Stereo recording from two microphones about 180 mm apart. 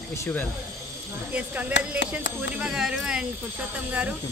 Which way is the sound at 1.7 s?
80° left.